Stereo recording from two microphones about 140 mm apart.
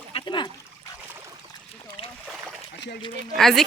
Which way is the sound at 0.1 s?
35° left (ahead or behind).